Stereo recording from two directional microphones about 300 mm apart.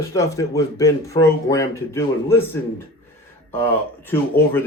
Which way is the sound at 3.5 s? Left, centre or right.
Centre.